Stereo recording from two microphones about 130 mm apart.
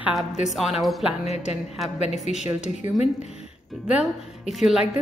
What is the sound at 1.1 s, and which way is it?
Speech, 55° left (ahead or behind).